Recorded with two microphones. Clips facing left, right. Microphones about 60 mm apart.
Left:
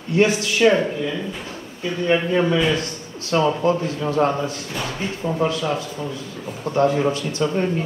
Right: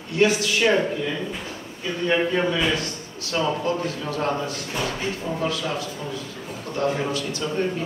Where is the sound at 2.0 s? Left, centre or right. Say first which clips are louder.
Left 3 dB; centre.